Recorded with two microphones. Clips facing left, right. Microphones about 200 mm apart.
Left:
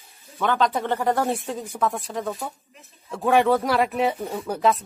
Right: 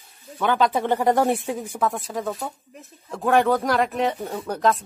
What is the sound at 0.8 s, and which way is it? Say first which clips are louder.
Speech: right 3 dB; 15° right (ahead or behind).